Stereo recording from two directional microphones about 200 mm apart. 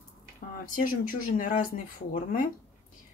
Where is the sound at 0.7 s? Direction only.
45° left (ahead or behind).